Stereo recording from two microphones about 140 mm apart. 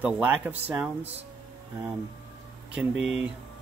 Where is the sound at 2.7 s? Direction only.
5° right (ahead or behind).